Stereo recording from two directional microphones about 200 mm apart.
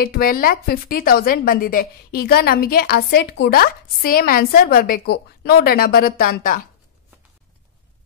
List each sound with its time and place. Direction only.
0.0 s a woman's voice: 50° left (ahead or behind)